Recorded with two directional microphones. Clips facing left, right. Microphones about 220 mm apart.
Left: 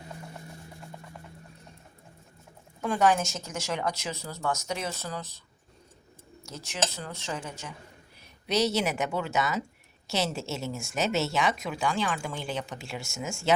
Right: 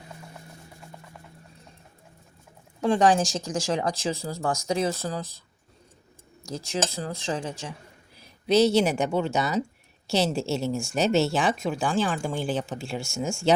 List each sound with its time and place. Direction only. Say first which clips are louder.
2.8 s speech: right 4 dB; 30° right (ahead or behind)
6.7 s speech: right 4 dB; 35° right (ahead or behind)